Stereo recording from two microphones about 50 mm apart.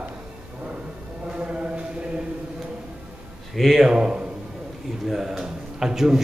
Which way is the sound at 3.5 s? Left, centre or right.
Centre.